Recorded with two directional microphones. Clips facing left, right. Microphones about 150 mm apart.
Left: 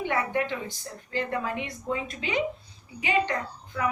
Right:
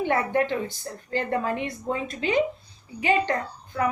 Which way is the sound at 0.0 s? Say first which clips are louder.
Right 4 dB; 40° right (ahead or behind).